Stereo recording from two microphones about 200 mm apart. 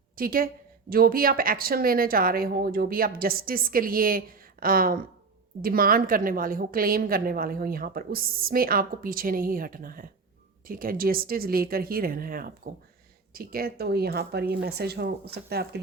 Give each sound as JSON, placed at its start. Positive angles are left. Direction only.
{"t": 0.2, "sound": "a woman's voice", "side_deg": -45}